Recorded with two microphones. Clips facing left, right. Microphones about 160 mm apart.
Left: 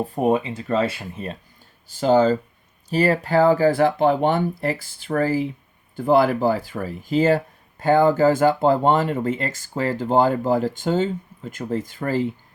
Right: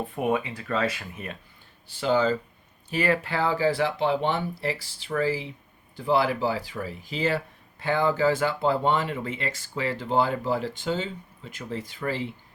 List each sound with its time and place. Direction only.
0.0 s speech: 35° left (ahead or behind)
1.9 s speech: 45° left (ahead or behind)